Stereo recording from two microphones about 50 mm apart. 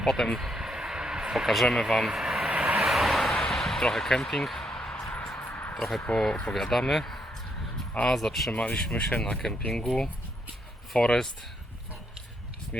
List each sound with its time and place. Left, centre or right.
0.0 s speech: centre
0.3 s vehicle: centre
1.3 s speech: centre
2.0 s vehicle: centre
2.5 s vehicle: right
2.7 s vehicle: centre
3.4 s speech: centre
4.7 s a sound: centre
5.5 s a sound: left
6.1 s speech: centre
6.5 s speech: centre
8.5 s speech: left